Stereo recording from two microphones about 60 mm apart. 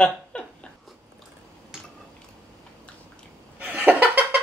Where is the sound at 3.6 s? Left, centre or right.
Right.